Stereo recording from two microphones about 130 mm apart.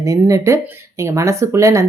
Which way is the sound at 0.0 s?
25° right (ahead or behind).